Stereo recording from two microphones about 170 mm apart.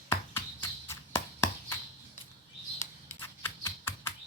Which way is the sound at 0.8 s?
15° left (ahead or behind).